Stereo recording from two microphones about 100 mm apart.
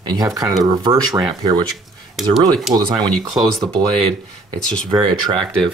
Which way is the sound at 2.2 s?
Centre (ahead or behind).